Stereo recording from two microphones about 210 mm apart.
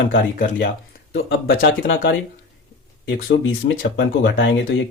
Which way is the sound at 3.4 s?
60° left (ahead or behind).